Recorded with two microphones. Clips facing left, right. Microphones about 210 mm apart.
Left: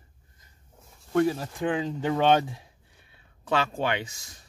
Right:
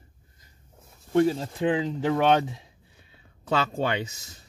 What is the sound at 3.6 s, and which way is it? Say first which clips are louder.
Speech: right 1 dB; 30° right (ahead or behind).